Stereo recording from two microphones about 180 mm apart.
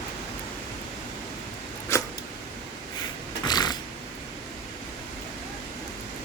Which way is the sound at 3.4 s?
25° left (ahead or behind).